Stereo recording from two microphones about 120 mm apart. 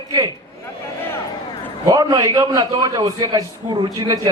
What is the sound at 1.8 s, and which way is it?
A man's voice, 30° right (ahead or behind).